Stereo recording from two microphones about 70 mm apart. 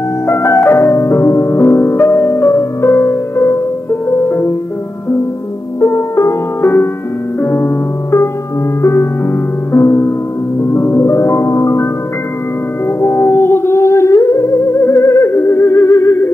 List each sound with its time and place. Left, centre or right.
0.3 s music: left
5.8 s music: left
9.7 s music: left
13.0 s music: left